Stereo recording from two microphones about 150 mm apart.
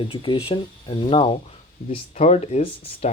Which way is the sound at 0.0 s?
35° left (ahead or behind).